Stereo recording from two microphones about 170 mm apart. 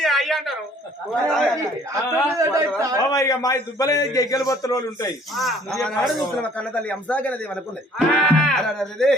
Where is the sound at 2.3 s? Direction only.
20° right (ahead or behind).